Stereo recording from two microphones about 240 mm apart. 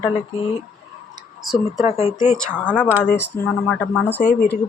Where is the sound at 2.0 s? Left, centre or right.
Left.